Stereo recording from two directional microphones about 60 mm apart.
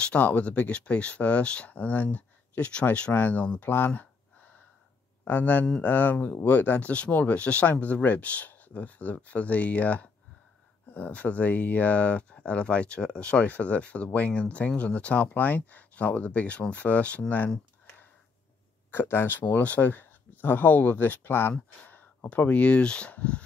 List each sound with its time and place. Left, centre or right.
0.0 s speech: left
5.2 s speech: left
18.9 s speech: left
22.5 s speech: left